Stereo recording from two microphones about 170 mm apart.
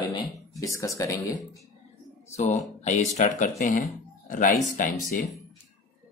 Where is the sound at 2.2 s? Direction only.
40° left (ahead or behind).